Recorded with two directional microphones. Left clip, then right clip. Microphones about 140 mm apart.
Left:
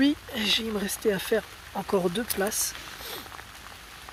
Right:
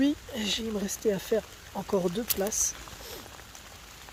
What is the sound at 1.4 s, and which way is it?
Speech, centre (ahead or behind).